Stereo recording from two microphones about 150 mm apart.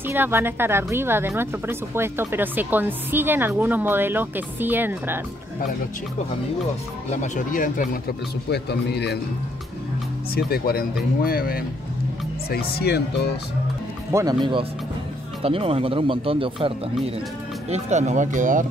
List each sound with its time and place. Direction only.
0.1 s speech: 15° right (ahead or behind)
7.1 s speech: 55° left (ahead or behind)
8.5 s speech: 90° left
10.3 s speech: 90° left
14.1 s speech: 30° right (ahead or behind)
17.6 s speech: 50° right (ahead or behind)